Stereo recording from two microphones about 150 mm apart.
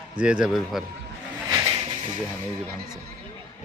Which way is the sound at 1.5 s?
25° right (ahead or behind).